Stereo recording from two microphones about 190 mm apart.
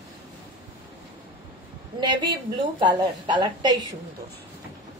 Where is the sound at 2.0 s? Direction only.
25° right (ahead or behind).